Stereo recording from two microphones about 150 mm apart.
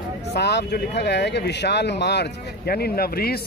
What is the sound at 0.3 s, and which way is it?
Speech, 90° left.